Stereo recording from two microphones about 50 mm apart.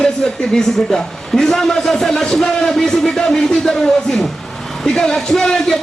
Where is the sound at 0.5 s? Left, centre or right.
Centre.